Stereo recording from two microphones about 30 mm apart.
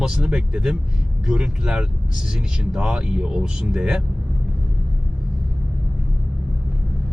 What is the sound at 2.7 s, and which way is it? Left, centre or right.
Speech, right.